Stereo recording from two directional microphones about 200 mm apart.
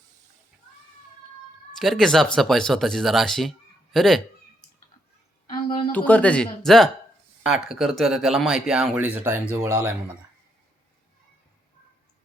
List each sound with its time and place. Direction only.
1.7 s speech: centre (ahead or behind)
5.5 s a sound: 25° left (ahead or behind)
5.9 s speech: 5° left (ahead or behind); by 9.7 s 10° right (ahead or behind)